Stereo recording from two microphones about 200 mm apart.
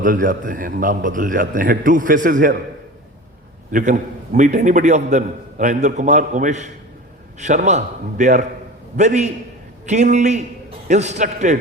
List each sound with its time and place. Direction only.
0.0 s a man's voice: 40° right (ahead or behind)
3.7 s a man's voice: 40° right (ahead or behind)